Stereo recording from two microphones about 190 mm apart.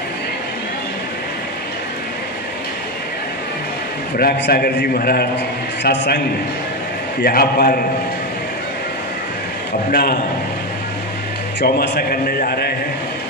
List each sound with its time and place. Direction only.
4.2 s a man's voice: 55° left (ahead or behind)
9.8 s a man's voice: 50° left (ahead or behind)
11.6 s a man's voice: 55° left (ahead or behind)